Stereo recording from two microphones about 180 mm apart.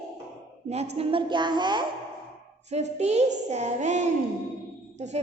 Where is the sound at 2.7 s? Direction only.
40° right (ahead or behind).